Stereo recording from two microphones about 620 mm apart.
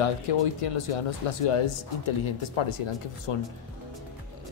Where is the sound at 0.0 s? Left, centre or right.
Left.